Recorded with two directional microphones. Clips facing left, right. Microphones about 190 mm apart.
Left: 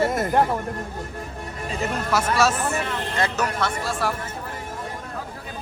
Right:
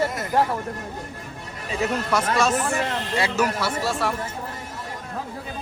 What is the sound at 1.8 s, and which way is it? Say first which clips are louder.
Speech: right 1 dB; 5° left (ahead or behind).